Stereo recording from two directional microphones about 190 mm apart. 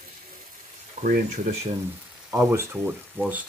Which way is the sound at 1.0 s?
45° right (ahead or behind).